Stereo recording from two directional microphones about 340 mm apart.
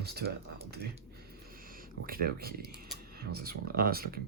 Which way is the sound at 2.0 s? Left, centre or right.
Right.